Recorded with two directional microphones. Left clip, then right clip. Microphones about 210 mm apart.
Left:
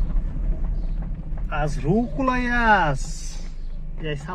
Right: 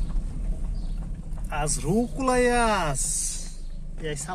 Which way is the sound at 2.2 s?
15° left (ahead or behind).